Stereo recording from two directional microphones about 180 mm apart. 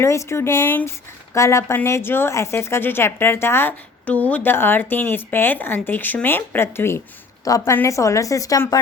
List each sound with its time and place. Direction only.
0.0 s speech: 15° left (ahead or behind)